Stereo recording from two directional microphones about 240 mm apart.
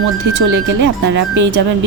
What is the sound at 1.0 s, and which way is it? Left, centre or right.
Speech, right.